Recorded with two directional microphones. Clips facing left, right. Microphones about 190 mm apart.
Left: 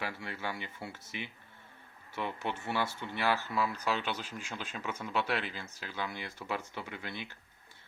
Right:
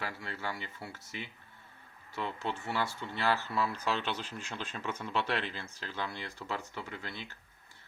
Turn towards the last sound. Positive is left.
turn(degrees=20)  # may be behind; listen again after turning